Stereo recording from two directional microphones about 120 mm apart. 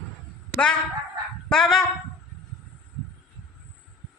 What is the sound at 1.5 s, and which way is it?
Speech, 5° left (ahead or behind).